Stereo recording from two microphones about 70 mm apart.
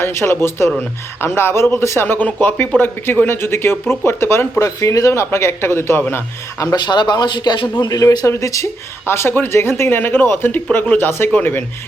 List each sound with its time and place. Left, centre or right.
0.0 s speech: left
2.8 s speech: left
4.6 s speech: left
6.7 s speech: left
7.8 s speech: left
9.0 s speech: left